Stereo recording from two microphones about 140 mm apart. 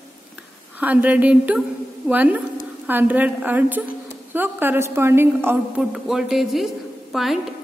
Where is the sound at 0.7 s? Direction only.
10° right (ahead or behind).